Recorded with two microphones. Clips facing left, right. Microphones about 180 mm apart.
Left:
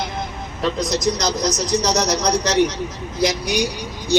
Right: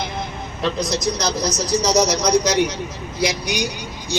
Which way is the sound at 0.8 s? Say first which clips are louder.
Left 3 dB; 20° left (ahead or behind).